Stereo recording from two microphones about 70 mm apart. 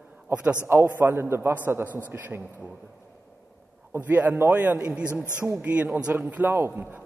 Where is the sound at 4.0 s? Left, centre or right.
Right.